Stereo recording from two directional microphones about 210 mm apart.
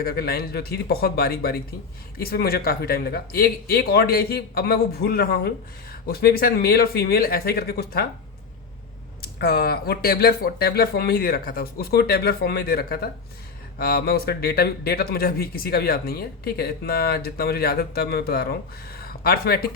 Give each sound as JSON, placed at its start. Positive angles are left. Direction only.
{"t": 0.0, "sound": "speech", "side_deg": 45}
{"t": 9.4, "sound": "speech", "side_deg": 45}